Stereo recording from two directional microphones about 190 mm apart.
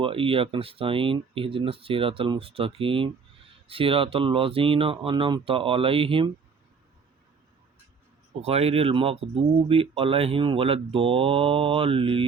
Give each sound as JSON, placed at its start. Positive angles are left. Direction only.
{"t": 0.0, "sound": "speech", "side_deg": -30}
{"t": 8.4, "sound": "speech", "side_deg": -35}